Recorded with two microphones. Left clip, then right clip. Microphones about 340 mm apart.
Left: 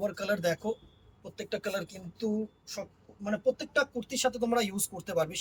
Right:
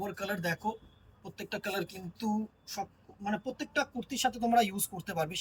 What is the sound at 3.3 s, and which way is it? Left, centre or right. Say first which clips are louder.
A man's voice: left 6 dB; centre.